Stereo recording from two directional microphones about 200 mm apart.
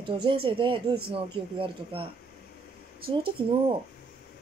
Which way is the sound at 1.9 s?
25° right (ahead or behind).